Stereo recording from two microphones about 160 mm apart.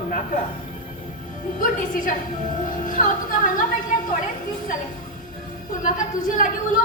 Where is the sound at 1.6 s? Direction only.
60° left (ahead or behind).